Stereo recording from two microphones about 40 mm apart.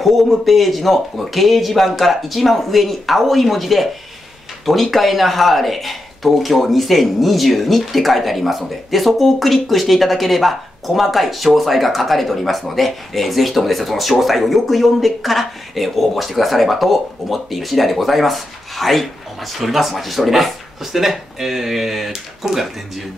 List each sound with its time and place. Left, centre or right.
0.0 s speech: centre